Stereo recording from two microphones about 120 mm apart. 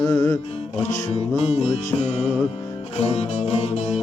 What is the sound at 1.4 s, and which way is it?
Music, 60° left (ahead or behind).